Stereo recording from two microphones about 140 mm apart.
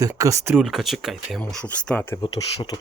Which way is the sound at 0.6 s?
Centre (ahead or behind).